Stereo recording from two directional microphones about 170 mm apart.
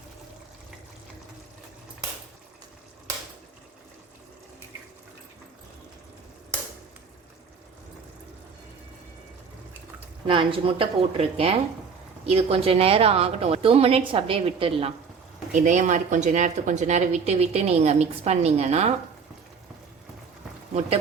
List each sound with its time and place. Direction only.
10.2 s a woman's voice: 30° right (ahead or behind)
15.5 s a woman's voice: 45° right (ahead or behind)